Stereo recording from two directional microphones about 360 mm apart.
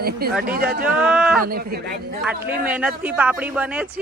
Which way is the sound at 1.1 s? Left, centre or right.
Centre.